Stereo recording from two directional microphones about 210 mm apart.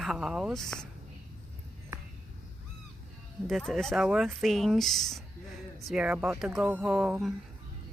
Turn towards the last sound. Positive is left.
turn(degrees=0)  # may be behind; listen again after turning